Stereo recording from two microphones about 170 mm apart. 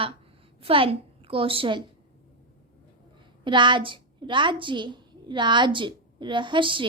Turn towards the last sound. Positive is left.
turn(degrees=-30)  # may be behind; listen again after turning